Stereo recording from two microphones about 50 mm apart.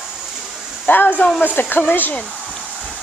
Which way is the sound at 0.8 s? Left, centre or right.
Left.